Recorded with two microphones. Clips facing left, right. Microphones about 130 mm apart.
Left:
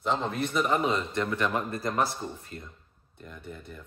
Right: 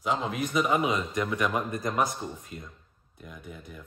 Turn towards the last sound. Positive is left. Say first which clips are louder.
# left 1 dB
turn(degrees=-5)  # may be behind; listen again after turning